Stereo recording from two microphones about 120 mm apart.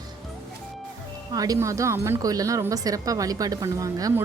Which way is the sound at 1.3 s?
30° right (ahead or behind).